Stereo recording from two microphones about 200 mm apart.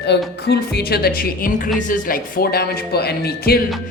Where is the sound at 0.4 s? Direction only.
55° left (ahead or behind).